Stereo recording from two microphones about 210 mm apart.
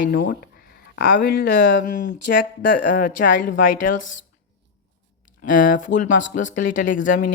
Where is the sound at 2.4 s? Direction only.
40° left (ahead or behind).